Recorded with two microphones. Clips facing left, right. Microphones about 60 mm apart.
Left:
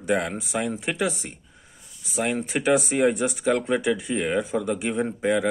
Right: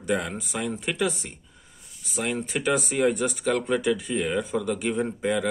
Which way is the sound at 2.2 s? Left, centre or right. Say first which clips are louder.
Left 2 dB; left.